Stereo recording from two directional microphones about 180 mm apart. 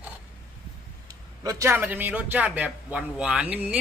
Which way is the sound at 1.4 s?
15° right (ahead or behind).